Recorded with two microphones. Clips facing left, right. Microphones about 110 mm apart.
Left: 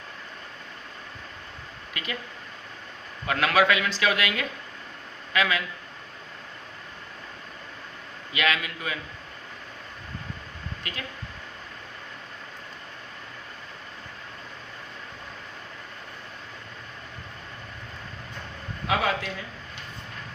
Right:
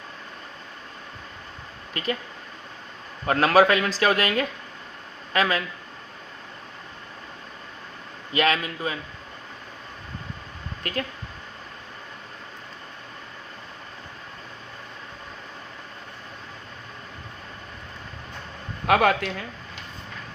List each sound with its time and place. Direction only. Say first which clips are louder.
1.9 s speech: right 7 dB; 40° right (ahead or behind)
3.2 s a man's voice: right 4 dB; 40° right (ahead or behind)
8.3 s a man's voice: right 4 dB; 40° right (ahead or behind)
10.8 s speech: right 10 dB; 50° right (ahead or behind)
18.9 s a man's voice: right 6 dB; 65° right (ahead or behind)